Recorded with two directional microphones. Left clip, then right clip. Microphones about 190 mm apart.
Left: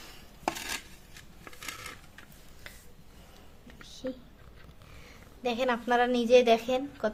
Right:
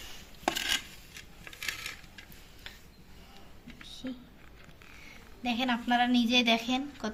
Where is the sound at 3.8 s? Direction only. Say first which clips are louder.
Even; 60° left (ahead or behind).